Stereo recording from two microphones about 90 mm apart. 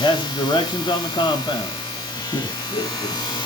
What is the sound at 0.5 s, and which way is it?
Speech, 55° left (ahead or behind).